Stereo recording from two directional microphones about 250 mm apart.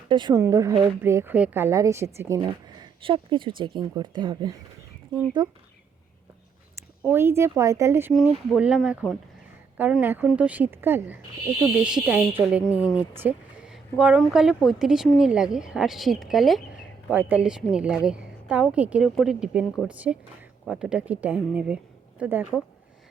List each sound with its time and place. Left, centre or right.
0.1 s speech: centre
7.1 s speech: centre